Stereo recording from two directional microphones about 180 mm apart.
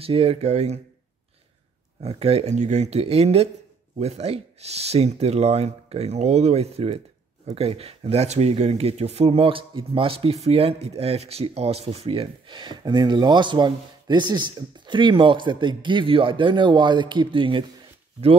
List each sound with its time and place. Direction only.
0.0 s speech: 30° right (ahead or behind)
2.0 s speech: 35° right (ahead or behind)